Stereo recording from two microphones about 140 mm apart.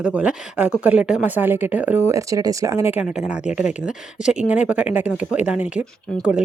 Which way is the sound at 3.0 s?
5° right (ahead or behind).